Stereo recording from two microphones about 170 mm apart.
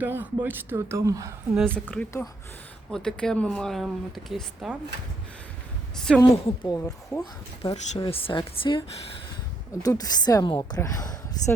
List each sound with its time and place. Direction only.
0.0 s speech: 10° right (ahead or behind)
1.9 s a woman's voice: 10° left (ahead or behind)
6.1 s a woman's voice: 10° left (ahead or behind); by 8.8 s 30° left (ahead or behind)
9.8 s speech: 20° left (ahead or behind)